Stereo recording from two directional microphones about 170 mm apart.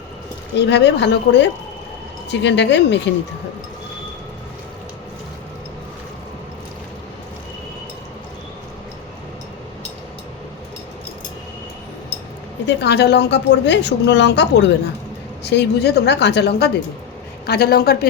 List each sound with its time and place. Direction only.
0.5 s a woman's voice: 85° left
12.6 s a woman's voice: 85° left
15.4 s a woman's voice: 80° left